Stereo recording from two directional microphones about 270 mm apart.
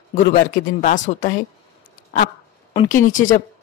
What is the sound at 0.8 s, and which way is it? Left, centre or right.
Speech, left.